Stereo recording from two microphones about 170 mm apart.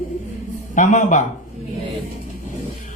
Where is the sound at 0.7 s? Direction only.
45° left (ahead or behind).